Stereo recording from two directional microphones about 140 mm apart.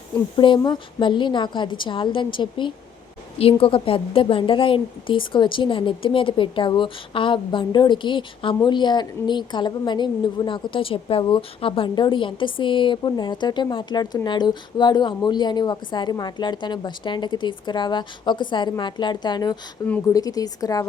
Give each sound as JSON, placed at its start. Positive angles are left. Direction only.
{"t": 0.3, "sound": "a woman's voice", "side_deg": 35}